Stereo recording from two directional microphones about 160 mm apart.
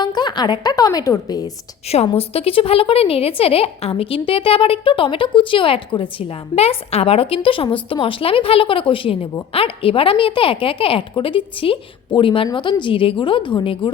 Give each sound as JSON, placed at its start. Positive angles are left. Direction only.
{"t": 0.0, "sound": "a woman's voice", "side_deg": 25}
{"t": 1.9, "sound": "a woman's voice", "side_deg": 40}